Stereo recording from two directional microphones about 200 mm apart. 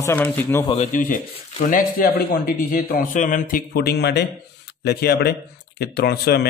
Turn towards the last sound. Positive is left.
turn(degrees=55)  # may be behind; listen again after turning